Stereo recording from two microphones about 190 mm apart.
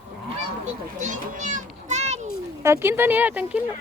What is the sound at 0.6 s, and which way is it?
A child's voice, 40° right (ahead or behind).